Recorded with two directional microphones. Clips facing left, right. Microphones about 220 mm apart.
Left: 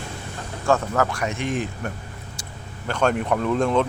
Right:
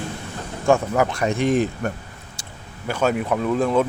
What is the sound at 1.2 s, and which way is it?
Speech, 35° right (ahead or behind).